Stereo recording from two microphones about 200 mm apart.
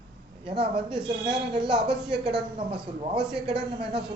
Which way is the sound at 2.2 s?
5° right (ahead or behind).